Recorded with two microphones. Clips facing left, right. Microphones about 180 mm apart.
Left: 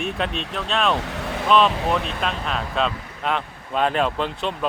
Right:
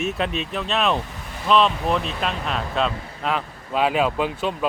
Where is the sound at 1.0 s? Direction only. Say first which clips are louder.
Left 4 dB; 75° left (ahead or behind).